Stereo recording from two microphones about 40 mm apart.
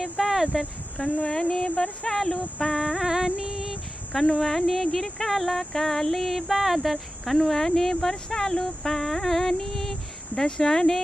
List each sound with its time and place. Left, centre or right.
0.0 s a sound: centre
1.0 s speech: left; by 2.8 s centre
3.0 s carnatic music: centre
4.4 s speech: centre
7.3 s speech: centre